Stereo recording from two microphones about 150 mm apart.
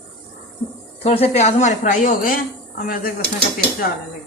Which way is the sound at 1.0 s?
45° left (ahead or behind).